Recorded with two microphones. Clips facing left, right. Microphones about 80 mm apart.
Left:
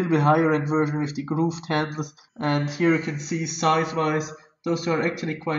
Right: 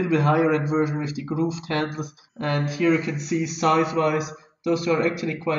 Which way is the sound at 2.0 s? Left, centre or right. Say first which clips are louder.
Left 1 dB; centre.